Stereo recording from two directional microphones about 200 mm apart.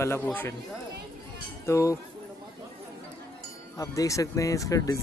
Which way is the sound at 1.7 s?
15° left (ahead or behind).